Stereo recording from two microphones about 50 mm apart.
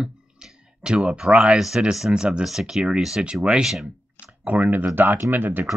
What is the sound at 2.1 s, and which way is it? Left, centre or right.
Speech, centre.